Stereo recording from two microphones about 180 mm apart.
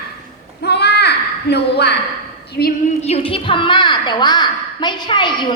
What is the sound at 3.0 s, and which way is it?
A woman's voice, 30° left (ahead or behind).